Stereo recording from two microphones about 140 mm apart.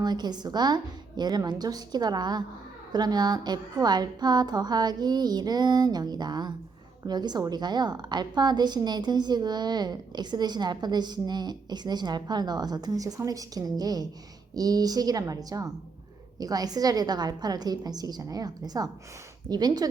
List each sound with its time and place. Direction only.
0.0 s a woman's voice: 30° right (ahead or behind)